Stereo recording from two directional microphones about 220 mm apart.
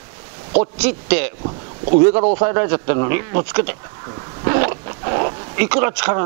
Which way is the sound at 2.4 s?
15° right (ahead or behind).